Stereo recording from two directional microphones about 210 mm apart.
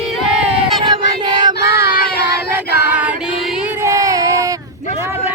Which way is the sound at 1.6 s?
50° left (ahead or behind).